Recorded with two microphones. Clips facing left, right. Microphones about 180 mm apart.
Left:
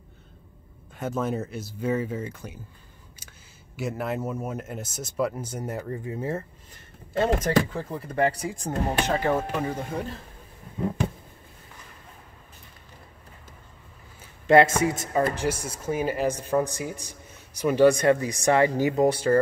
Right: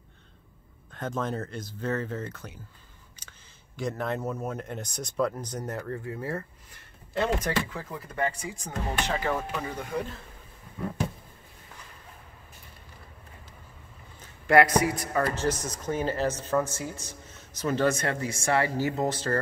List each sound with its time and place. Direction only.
0.9 s a man's voice: 10° left (ahead or behind)
7.2 s speech: 40° left (ahead or behind)
8.6 s speech: 45° left (ahead or behind)
9.6 s a man's voice: 25° left (ahead or behind)
14.5 s a man's voice: 25° left (ahead or behind)
15.3 s speech: 10° left (ahead or behind)